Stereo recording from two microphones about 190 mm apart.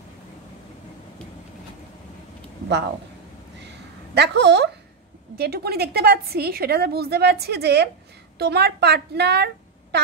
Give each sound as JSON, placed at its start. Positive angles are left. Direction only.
{"t": 4.1, "sound": "a woman's voice", "side_deg": -65}